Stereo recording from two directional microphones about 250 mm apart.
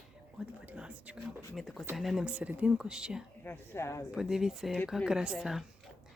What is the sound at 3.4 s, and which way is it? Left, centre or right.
Speech, centre.